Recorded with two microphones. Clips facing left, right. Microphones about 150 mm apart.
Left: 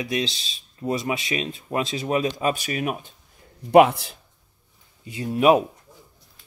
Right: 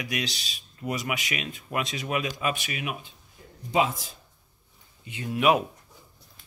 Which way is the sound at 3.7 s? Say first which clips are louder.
Left 11 dB; 65° left (ahead or behind).